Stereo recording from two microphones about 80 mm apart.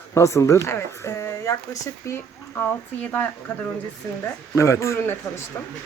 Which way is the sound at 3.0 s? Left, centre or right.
Left.